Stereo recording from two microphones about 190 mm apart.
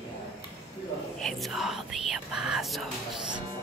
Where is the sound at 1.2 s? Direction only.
Centre (ahead or behind).